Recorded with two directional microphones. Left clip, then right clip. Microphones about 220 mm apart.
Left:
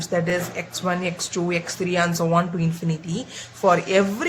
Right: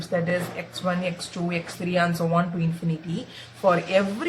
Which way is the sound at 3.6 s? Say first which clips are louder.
Left 3 dB; 45° left (ahead or behind).